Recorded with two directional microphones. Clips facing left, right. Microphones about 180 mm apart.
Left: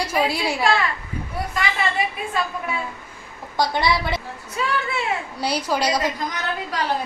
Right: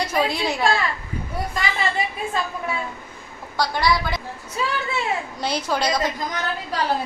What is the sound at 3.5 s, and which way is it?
Speech, 25° left (ahead or behind).